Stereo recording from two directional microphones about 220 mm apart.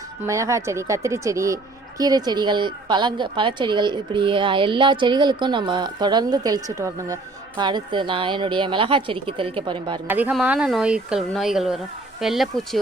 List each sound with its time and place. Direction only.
0.3 s a woman's voice: 15° right (ahead or behind)
10.1 s speech: 5° right (ahead or behind)